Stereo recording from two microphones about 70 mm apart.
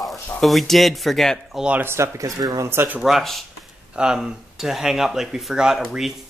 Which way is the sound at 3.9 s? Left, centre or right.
Centre.